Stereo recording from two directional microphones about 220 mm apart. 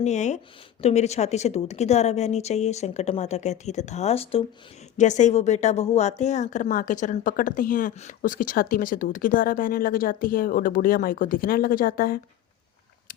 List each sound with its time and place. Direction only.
0.0 s a woman's voice: 30° left (ahead or behind)